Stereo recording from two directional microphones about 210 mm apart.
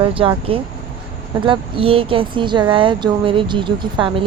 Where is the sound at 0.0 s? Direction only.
25° right (ahead or behind).